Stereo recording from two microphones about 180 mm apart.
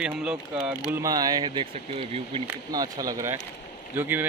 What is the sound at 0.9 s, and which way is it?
Speech, 20° right (ahead or behind).